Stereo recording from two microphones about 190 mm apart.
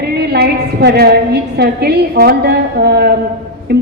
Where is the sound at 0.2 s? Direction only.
60° right (ahead or behind).